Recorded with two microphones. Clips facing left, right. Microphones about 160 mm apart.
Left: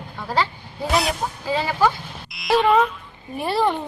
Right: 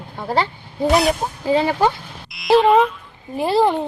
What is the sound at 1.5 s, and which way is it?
Speech, 25° right (ahead or behind).